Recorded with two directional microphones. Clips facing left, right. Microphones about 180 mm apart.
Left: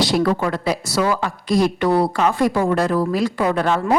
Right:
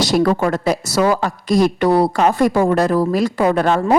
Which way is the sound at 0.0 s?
45° right (ahead or behind).